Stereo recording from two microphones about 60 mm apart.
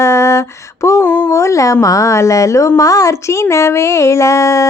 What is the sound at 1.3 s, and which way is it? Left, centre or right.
A woman's voice, left.